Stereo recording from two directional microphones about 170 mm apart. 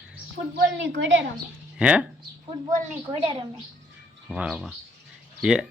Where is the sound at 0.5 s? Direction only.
90° right.